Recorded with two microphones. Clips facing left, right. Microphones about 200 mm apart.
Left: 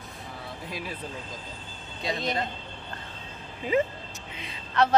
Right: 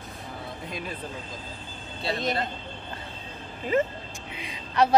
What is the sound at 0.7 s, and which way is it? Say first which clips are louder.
Speech: even; 5° left (ahead or behind).